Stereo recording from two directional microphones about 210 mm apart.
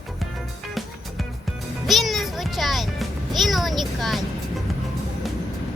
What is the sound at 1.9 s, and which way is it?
A child's voice, centre (ahead or behind).